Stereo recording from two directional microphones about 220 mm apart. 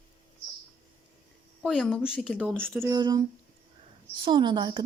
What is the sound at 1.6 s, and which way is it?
A woman's voice, 5° left (ahead or behind).